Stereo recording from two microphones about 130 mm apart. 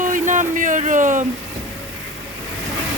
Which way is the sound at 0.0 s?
80° right.